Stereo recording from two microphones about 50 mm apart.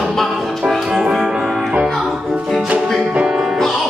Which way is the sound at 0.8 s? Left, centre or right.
Centre.